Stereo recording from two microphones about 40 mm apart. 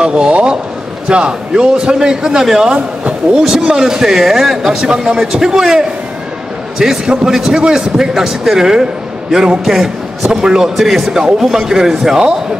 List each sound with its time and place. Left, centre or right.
0.0 s a man's voice: right
2.7 s speech: right
3.5 s a man's voice: centre
4.8 s speech: right
5.1 s a man's voice: centre